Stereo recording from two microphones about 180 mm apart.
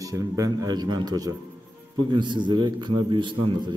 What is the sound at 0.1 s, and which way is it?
A man's voice, 20° right (ahead or behind).